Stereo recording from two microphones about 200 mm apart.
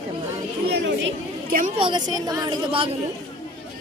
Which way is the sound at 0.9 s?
65° right (ahead or behind).